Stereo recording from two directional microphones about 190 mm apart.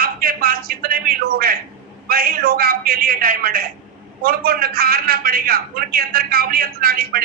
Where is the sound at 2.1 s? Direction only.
50° right (ahead or behind).